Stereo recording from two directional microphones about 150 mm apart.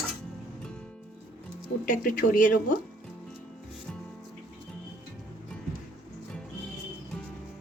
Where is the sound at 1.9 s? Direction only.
65° left (ahead or behind).